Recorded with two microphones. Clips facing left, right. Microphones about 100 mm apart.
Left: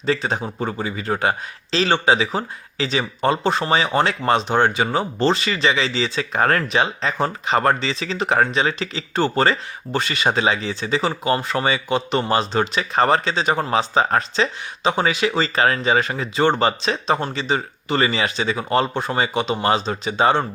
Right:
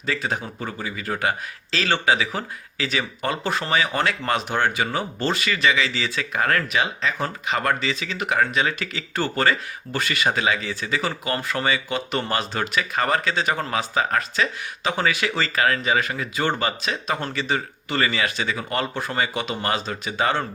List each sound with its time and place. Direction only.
0.0 s speech: 30° left (ahead or behind)
17.2 s speech: 20° left (ahead or behind)